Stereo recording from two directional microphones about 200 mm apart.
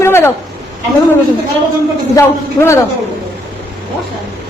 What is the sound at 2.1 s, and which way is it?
Speech, 15° left (ahead or behind).